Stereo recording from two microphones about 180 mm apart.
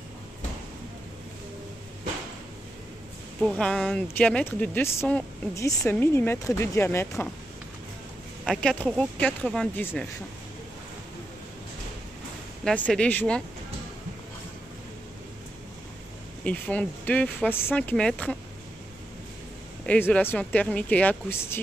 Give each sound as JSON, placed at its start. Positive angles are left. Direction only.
{"t": 3.3, "sound": "speech", "side_deg": 5}
{"t": 8.5, "sound": "speech", "side_deg": 5}
{"t": 12.6, "sound": "speech", "side_deg": 5}
{"t": 16.4, "sound": "speech", "side_deg": 10}
{"t": 19.9, "sound": "speech", "side_deg": 10}